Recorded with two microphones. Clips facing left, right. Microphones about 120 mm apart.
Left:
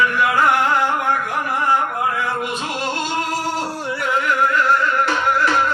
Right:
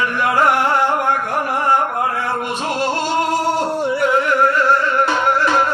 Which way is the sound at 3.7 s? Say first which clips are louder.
Right 6 dB; 25° right (ahead or behind).